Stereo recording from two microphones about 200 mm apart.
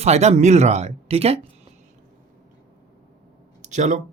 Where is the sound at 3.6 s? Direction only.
35° right (ahead or behind).